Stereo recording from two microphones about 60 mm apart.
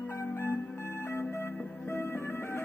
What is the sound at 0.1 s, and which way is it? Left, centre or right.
Music, left.